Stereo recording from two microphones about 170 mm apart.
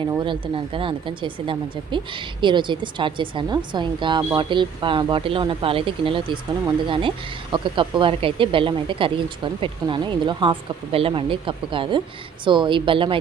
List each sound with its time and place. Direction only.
0.2 s speech: 30° right (ahead or behind)